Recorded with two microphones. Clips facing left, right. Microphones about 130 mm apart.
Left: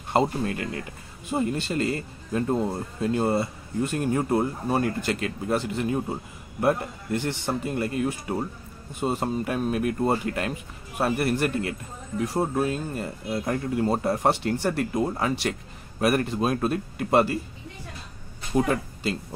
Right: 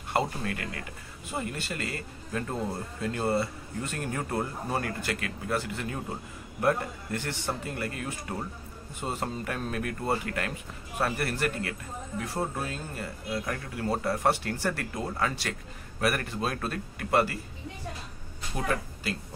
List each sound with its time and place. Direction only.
0.1 s speech: 25° left (ahead or behind)
18.5 s speech: 25° left (ahead or behind)